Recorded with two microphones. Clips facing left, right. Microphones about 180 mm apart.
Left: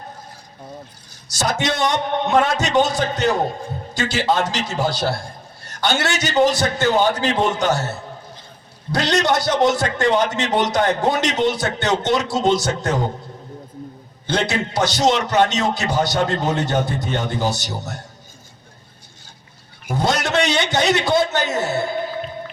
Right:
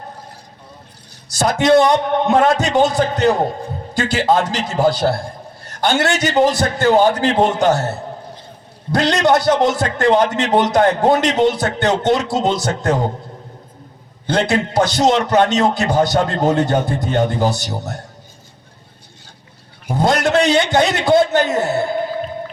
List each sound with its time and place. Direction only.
1.4 s a man's voice: 55° right (ahead or behind)
14.3 s a man's voice: 55° right (ahead or behind)
20.0 s a man's voice: 55° right (ahead or behind)